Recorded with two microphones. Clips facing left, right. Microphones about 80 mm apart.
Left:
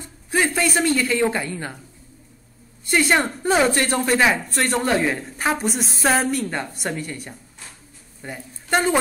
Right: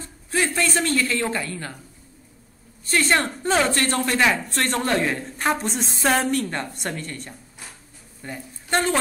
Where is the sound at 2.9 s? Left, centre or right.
Centre.